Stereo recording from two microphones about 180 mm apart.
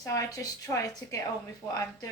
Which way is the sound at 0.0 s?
20° left (ahead or behind).